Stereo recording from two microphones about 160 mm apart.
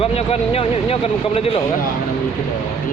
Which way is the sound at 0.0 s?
35° left (ahead or behind).